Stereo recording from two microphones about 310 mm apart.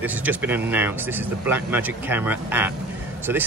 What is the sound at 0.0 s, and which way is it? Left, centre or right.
Speech, centre.